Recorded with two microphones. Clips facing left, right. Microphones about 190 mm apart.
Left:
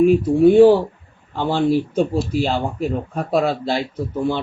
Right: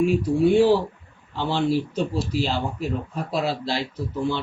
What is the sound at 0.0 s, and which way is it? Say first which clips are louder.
A man's voice: left 7 dB; 55° left (ahead or behind).